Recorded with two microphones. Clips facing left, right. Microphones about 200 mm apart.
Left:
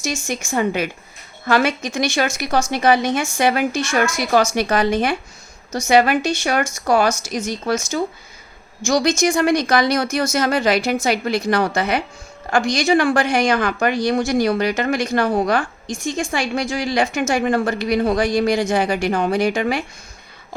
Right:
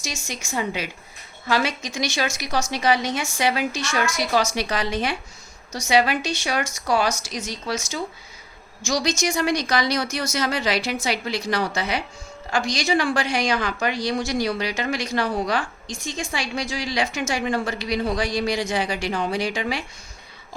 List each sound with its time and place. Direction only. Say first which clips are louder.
0.0 s speech: left 8 dB; 50° left (ahead or behind)